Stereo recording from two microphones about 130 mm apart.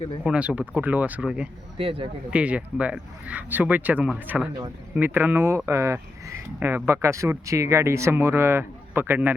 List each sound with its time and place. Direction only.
0.3 s speech: 10° right (ahead or behind)
1.8 s speech: 45° right (ahead or behind)
2.3 s speech: 10° right (ahead or behind)
4.5 s speech: 20° right (ahead or behind)